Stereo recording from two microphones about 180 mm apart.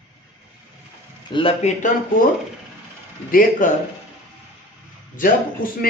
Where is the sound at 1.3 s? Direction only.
30° left (ahead or behind).